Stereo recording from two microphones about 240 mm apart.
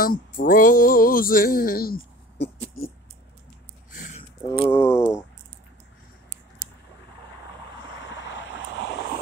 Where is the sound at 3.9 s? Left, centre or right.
Left.